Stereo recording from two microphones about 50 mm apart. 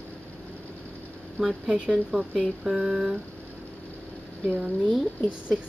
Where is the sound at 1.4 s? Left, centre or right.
Centre.